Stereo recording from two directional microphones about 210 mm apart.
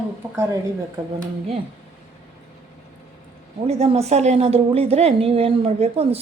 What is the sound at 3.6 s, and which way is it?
A woman's voice, 30° right (ahead or behind).